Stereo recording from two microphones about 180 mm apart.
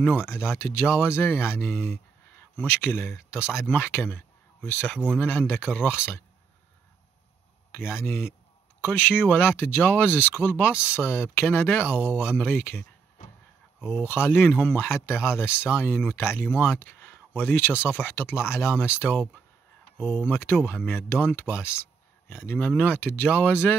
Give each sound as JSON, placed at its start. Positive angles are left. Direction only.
{"t": 0.0, "sound": "speech", "side_deg": 10}
{"t": 7.7, "sound": "speech", "side_deg": 15}
{"t": 13.2, "sound": "a sound", "side_deg": 45}
{"t": 13.8, "sound": "speech", "side_deg": 10}